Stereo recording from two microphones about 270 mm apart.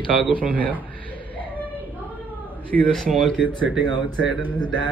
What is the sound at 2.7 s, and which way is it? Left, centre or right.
Speech, right.